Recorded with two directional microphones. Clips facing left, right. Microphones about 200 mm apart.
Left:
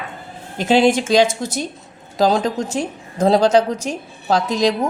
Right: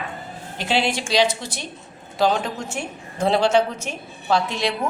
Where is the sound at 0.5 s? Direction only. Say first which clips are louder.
Left 9 dB; 45° left (ahead or behind).